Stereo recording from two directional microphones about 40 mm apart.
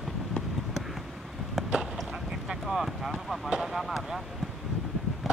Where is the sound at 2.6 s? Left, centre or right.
Centre.